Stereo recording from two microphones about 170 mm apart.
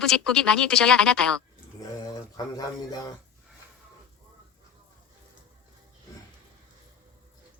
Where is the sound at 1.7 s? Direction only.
20° left (ahead or behind).